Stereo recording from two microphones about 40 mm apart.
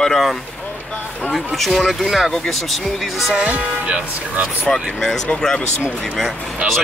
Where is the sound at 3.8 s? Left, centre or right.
Right.